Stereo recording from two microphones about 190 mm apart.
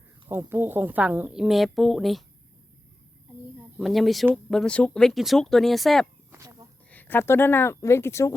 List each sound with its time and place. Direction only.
0.3 s a woman's voice: 10° right (ahead or behind)
3.8 s a woman's voice: centre (ahead or behind)
6.3 s a sound: 15° right (ahead or behind)
6.9 s speech: 10° left (ahead or behind)